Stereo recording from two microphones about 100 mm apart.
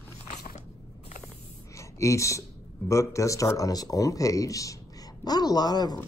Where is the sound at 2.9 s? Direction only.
30° left (ahead or behind).